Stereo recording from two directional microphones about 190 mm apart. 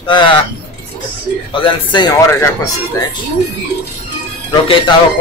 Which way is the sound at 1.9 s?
20° left (ahead or behind).